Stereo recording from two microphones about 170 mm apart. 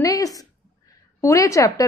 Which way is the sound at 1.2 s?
20° left (ahead or behind).